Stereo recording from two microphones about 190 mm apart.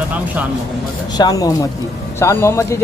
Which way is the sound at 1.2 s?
20° left (ahead or behind).